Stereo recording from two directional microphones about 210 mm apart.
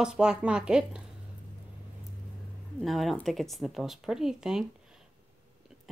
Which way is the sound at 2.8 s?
Centre (ahead or behind).